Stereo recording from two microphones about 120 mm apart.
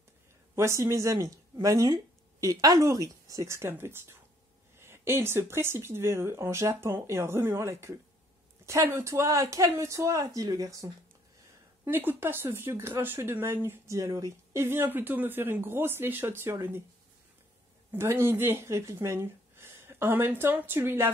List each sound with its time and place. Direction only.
0.6 s speech: 25° right (ahead or behind)
11.8 s speech: 15° right (ahead or behind)
17.9 s speech: 20° right (ahead or behind)